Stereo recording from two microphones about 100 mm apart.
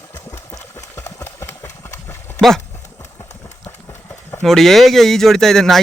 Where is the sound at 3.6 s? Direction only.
25° left (ahead or behind).